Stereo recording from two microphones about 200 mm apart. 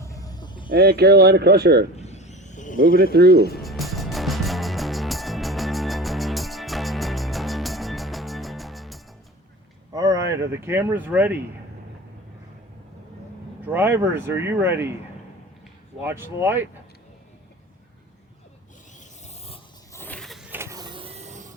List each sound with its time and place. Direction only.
0.0 s vehicle: 15° left (ahead or behind)
0.7 s speech: 50° right (ahead or behind)
2.0 s insect: 35° left (ahead or behind)
2.9 s speech: 50° right (ahead or behind)
3.3 s speech: 50° left (ahead or behind)
3.6 s music: centre (ahead or behind)
9.9 s speech: 20° right (ahead or behind)
13.7 s speech: 10° right (ahead or behind)
16.0 s speech: 10° right (ahead or behind)
18.9 s zipper: 35° left (ahead or behind)
19.9 s power windows: 10° left (ahead or behind); by 21.5 s 35° right (ahead or behind)